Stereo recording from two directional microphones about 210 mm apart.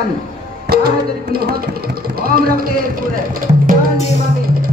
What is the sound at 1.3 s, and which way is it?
Speech, 45° right (ahead or behind).